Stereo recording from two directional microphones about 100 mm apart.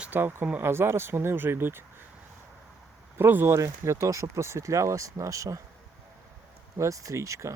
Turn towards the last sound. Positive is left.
turn(degrees=-30)  # may be behind; listen again after turning